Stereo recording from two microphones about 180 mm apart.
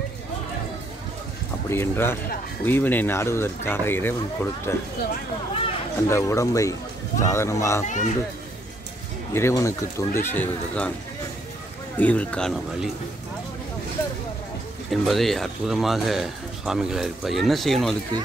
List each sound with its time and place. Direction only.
1.7 s speech: 15° left (ahead or behind)
6.0 s speech: 15° left (ahead or behind)
7.8 s a child's voice: 45° left (ahead or behind)
9.3 s speech: 15° left (ahead or behind)
12.0 s speech: 10° left (ahead or behind)
14.9 s a man's voice: centre (ahead or behind)